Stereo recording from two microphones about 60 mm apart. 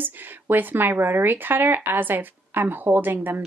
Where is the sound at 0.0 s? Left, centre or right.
Right.